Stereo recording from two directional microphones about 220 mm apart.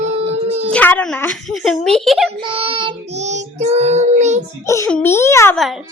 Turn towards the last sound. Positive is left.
turn(degrees=0)  # may be behind; listen again after turning